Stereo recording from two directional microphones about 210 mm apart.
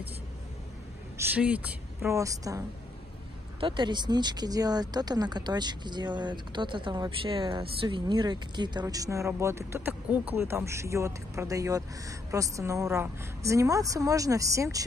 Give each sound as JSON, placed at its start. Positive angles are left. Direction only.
{"t": 1.1, "sound": "speech", "side_deg": -5}
{"t": 3.6, "sound": "speech", "side_deg": -20}